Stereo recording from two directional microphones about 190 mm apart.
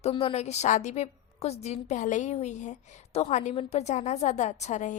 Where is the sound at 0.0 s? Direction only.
30° left (ahead or behind).